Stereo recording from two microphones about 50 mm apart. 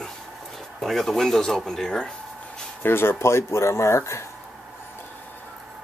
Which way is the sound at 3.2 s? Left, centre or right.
Left.